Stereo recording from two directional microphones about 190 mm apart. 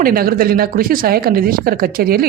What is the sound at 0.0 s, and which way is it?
Speech, 50° right (ahead or behind).